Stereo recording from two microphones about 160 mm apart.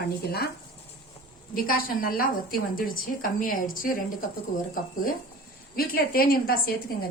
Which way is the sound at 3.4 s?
60° left (ahead or behind).